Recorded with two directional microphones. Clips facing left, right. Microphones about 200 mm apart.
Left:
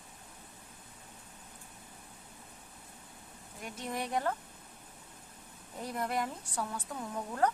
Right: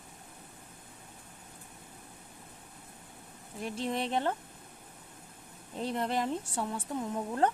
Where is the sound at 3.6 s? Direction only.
30° right (ahead or behind).